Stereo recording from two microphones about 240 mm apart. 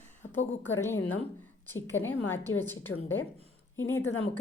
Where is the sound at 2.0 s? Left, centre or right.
Centre.